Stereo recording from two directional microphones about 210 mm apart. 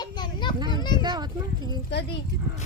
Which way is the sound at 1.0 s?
20° right (ahead or behind).